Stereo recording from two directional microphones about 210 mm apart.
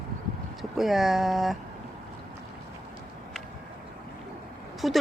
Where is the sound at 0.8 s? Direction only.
Centre (ahead or behind).